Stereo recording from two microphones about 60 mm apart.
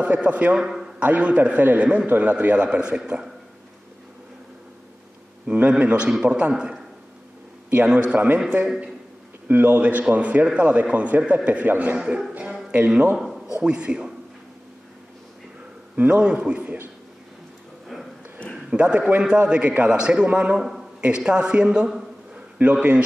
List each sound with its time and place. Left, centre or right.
0.0 s a man's voice: right
0.6 s a man's voice: centre
0.9 s a man's voice: right
5.5 s a man's voice: right
8.6 s a man's voice: centre
9.5 s a man's voice: right
13.1 s a man's voice: centre
13.6 s a man's voice: centre
16.0 s a man's voice: centre
18.7 s a man's voice: centre
20.5 s a man's voice: centre
21.0 s a man's voice: centre
22.3 s a sound: right